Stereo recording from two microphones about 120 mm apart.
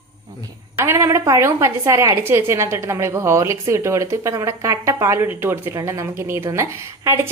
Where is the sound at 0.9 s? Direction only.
20° right (ahead or behind).